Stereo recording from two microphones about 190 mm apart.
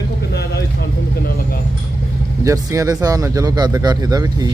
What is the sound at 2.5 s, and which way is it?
Speech, 15° right (ahead or behind).